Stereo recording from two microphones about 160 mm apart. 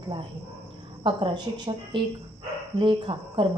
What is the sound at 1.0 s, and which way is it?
Speech, 30° right (ahead or behind).